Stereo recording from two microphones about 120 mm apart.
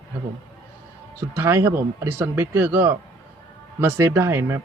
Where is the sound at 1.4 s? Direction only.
20° right (ahead or behind).